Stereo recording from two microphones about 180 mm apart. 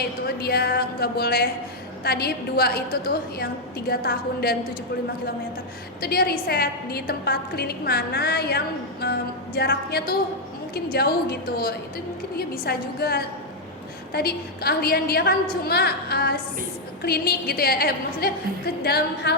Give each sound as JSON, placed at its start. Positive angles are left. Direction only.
{"t": 0.0, "sound": "a woman's voice", "side_deg": 60}
{"t": 6.0, "sound": "a woman's voice", "side_deg": 60}